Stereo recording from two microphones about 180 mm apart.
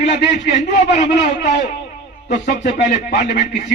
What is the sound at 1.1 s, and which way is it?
Speech, 70° left (ahead or behind).